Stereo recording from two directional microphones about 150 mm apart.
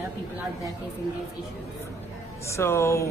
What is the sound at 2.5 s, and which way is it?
Speech, 20° left (ahead or behind).